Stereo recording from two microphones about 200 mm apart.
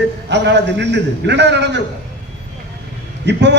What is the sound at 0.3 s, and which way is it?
A man's voice, 60° right (ahead or behind).